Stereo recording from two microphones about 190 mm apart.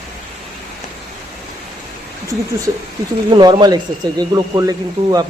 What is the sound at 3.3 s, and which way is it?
Speech, 25° right (ahead or behind).